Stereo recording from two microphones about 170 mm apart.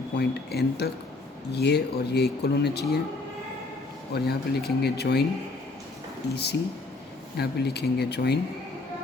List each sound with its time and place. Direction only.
0.2 s speech: 75° left (ahead or behind)
4.1 s speech: 65° left (ahead or behind)
6.3 s speech: 75° left (ahead or behind)